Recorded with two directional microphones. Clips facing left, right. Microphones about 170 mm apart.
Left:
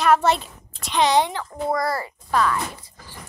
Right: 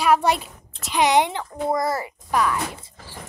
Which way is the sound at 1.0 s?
20° right (ahead or behind).